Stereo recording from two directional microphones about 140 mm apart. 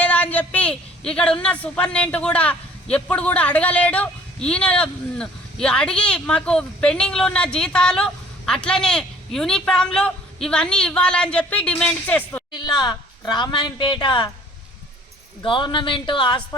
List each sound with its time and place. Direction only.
0.0 s a man's voice: 10° left (ahead or behind)
12.5 s a woman's voice: 30° left (ahead or behind)
15.4 s a man's voice: 35° left (ahead or behind)